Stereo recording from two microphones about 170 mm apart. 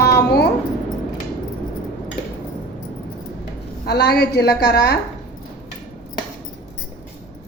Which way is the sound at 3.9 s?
70° left (ahead or behind).